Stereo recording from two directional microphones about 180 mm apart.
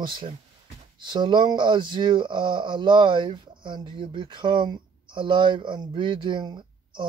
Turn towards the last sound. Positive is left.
turn(degrees=-25)  # may be behind; listen again after turning